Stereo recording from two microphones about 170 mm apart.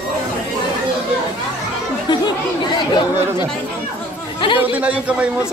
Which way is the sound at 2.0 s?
25° left (ahead or behind).